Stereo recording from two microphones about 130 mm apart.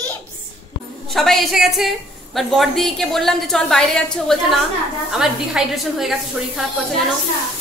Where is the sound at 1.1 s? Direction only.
Centre (ahead or behind).